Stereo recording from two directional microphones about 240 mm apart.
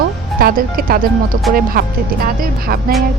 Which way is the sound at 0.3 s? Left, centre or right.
Right.